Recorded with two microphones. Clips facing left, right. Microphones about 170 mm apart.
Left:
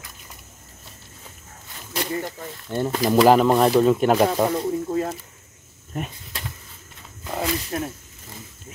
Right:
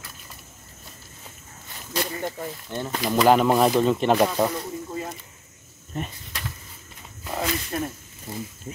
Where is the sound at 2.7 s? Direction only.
10° left (ahead or behind).